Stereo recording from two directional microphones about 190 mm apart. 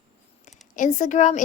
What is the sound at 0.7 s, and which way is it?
Speech, 40° left (ahead or behind).